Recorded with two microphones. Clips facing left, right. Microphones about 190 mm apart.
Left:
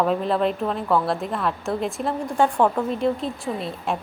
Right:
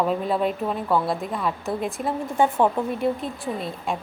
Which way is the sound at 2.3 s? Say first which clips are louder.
Left 1 dB; 15° right (ahead or behind).